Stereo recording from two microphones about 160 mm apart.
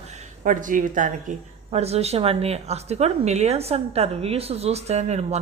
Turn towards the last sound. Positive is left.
turn(degrees=-45)  # may be behind; listen again after turning